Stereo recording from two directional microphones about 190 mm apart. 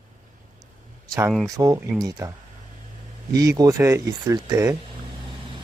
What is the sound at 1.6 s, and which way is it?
Speech, 15° right (ahead or behind).